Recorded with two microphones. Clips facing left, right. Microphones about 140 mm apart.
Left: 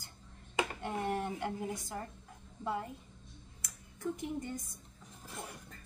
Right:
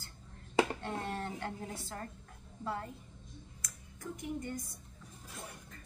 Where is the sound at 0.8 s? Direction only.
15° left (ahead or behind).